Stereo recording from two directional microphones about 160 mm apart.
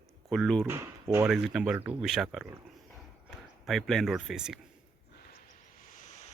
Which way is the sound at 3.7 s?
Centre (ahead or behind).